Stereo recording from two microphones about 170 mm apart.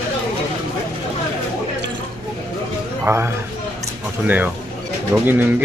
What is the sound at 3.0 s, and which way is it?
Speech, 15° right (ahead or behind).